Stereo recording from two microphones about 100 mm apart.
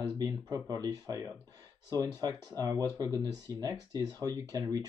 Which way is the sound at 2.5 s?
40° right (ahead or behind).